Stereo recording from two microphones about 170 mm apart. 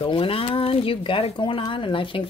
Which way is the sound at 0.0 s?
35° left (ahead or behind).